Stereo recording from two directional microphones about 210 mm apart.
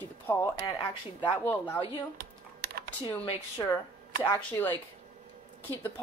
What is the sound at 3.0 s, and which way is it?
Speech, 25° left (ahead or behind).